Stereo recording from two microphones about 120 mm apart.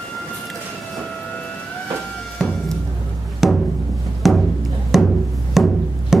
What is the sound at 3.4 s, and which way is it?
Music, centre (ahead or behind).